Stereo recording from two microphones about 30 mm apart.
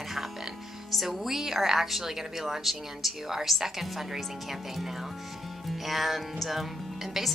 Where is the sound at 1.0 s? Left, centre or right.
Centre.